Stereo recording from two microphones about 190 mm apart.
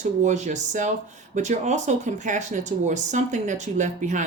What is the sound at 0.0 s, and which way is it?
Speech, 40° right (ahead or behind).